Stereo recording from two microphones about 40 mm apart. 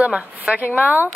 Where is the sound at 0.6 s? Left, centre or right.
Left.